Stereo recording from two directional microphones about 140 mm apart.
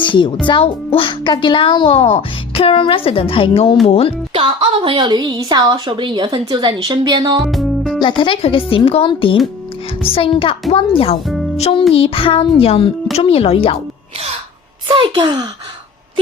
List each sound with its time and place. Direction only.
0.0 s a child's voice: 35° left (ahead or behind)
4.4 s a woman's voice: 40° right (ahead or behind)
7.4 s music: centre (ahead or behind)
8.2 s a child's voice: 40° left (ahead or behind)
14.8 s a child's voice: 40° right (ahead or behind)